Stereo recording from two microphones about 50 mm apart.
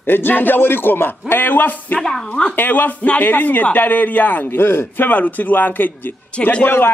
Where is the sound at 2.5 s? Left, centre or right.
Left.